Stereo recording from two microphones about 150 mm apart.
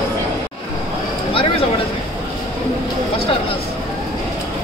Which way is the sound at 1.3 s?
35° left (ahead or behind).